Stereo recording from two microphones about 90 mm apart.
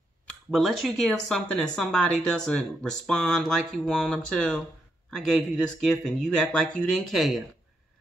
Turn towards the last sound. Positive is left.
turn(degrees=0)  # may be behind; listen again after turning